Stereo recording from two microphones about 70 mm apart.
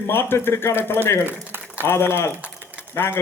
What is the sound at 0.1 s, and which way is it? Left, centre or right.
A man's voice, left.